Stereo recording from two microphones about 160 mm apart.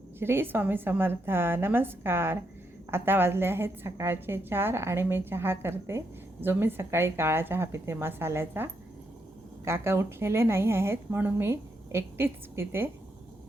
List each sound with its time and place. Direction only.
0.2 s a woman's voice: 15° right (ahead or behind)